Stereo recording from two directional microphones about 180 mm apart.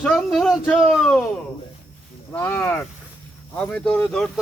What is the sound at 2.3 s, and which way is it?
Speech, 10° left (ahead or behind).